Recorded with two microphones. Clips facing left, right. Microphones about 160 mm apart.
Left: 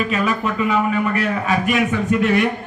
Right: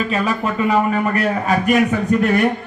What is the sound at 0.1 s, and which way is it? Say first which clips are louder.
A man's voice: right 1 dB; 35° right (ahead or behind).